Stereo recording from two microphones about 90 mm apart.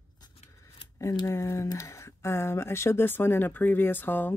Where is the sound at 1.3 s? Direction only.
30° left (ahead or behind).